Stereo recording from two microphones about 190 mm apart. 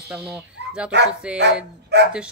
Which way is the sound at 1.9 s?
60° right (ahead or behind).